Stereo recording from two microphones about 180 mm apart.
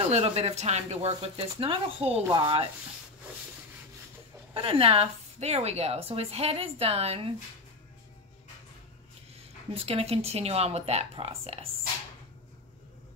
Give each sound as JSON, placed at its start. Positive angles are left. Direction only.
{"t": 0.0, "sound": "a woman's voice", "side_deg": -35}
{"t": 2.2, "sound": "rub", "side_deg": -25}
{"t": 4.6, "sound": "a woman's voice", "side_deg": -30}
{"t": 9.8, "sound": "a woman's voice", "side_deg": -35}